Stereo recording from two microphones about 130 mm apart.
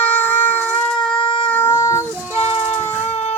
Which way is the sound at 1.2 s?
40° left (ahead or behind).